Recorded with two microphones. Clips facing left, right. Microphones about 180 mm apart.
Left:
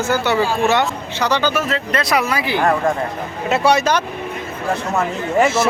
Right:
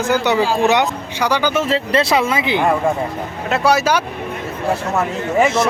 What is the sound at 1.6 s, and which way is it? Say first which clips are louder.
Speech: right 4 dB; 30° right (ahead or behind).